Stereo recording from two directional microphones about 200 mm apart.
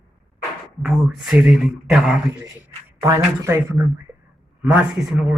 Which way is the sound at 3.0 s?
15° right (ahead or behind).